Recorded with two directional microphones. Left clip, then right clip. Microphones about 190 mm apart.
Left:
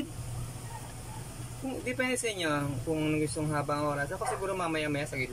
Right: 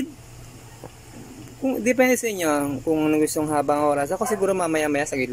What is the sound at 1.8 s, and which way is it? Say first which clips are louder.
Speech: right 12 dB; 40° right (ahead or behind).